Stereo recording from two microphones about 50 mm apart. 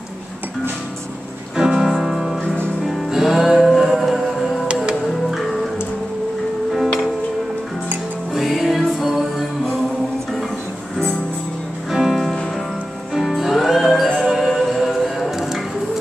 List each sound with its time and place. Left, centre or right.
1.6 s music: centre
2.4 s music: left
2.9 s music: centre
8.3 s music: centre
11.9 s music: centre